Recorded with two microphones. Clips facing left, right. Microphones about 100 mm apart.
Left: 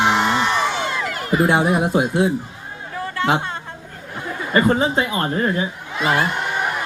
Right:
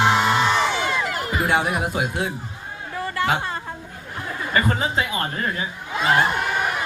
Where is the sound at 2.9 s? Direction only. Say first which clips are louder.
Left 1 dB; centre (ahead or behind).